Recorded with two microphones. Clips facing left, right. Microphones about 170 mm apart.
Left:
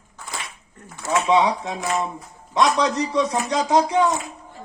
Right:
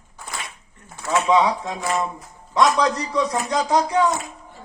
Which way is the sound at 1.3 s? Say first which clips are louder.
Even; 20° left (ahead or behind).